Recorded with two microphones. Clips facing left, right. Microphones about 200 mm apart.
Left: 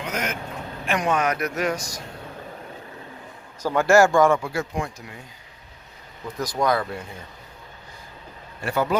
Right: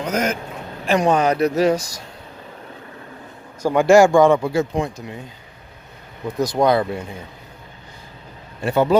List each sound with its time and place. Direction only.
0.0 s vehicle: 40° right (ahead or behind)
0.9 s speech: 35° right (ahead or behind)
3.6 s speech: 15° right (ahead or behind)
6.2 s speech: 60° right (ahead or behind)
6.6 s speech: 25° right (ahead or behind)
8.6 s speech: 25° right (ahead or behind)